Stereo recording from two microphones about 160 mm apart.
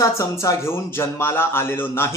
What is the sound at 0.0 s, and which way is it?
Speech, 20° left (ahead or behind).